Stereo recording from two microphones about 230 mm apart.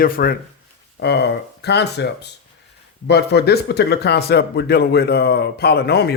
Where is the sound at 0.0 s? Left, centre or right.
Left.